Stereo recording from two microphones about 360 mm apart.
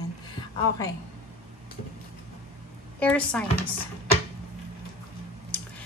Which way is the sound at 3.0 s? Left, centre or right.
Centre.